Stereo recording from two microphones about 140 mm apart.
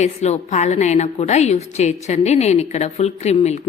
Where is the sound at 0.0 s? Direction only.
55° left (ahead or behind).